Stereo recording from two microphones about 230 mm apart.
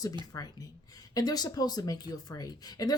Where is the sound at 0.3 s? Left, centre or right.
Centre.